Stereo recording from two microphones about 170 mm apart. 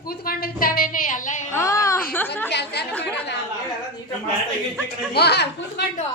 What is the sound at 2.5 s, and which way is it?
Chatter, 80° left.